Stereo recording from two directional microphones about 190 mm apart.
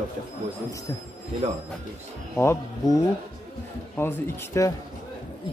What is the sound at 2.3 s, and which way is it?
Speech, 15° left (ahead or behind).